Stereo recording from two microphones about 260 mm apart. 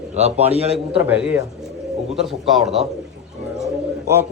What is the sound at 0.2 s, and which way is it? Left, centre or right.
Speech, right.